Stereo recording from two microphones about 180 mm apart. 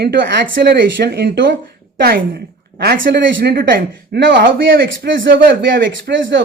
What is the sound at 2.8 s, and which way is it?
Speech, 60° right (ahead or behind).